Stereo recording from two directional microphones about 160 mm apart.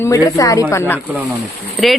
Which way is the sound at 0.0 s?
20° left (ahead or behind).